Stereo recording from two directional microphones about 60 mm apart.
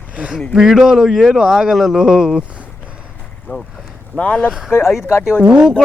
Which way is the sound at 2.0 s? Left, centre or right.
Centre.